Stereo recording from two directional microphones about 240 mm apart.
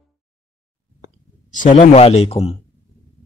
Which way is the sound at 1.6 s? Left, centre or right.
Left.